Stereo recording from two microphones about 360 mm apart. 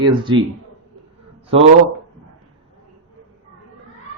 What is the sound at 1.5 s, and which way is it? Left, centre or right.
Speech, centre.